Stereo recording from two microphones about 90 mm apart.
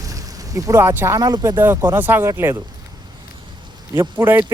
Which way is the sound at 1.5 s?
30° right (ahead or behind).